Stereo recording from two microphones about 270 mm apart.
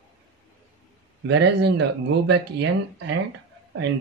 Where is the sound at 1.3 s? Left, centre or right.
Right.